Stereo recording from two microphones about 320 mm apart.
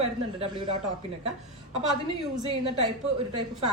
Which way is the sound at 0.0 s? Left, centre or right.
Centre.